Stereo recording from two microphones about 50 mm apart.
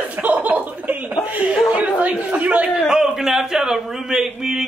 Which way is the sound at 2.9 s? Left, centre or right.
Centre.